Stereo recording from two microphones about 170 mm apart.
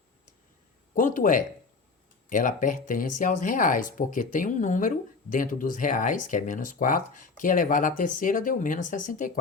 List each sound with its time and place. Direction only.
0.9 s speech: 50° left (ahead or behind)